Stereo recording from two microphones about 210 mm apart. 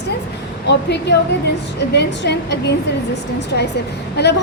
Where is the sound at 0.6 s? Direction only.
55° left (ahead or behind).